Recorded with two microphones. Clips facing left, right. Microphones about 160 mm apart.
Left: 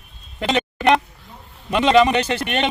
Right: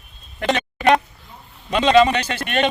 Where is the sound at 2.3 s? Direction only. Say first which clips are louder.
Left 4 dB; 15° left (ahead or behind).